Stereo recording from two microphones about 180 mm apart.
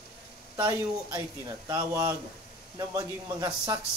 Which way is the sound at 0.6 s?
20° right (ahead or behind).